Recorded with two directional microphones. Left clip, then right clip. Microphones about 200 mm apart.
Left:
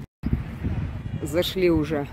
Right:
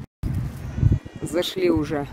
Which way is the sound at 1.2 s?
Centre (ahead or behind).